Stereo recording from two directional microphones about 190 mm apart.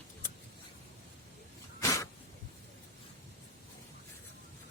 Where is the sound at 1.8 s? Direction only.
15° left (ahead or behind).